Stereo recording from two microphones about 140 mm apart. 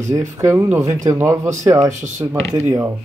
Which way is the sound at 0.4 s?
15° right (ahead or behind).